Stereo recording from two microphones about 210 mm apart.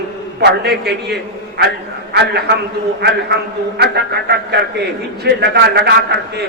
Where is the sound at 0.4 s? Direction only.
50° right (ahead or behind).